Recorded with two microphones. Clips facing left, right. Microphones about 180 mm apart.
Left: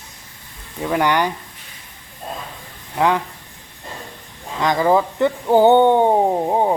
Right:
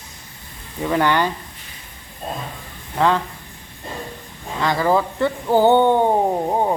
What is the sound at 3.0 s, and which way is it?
Speech, 15° left (ahead or behind).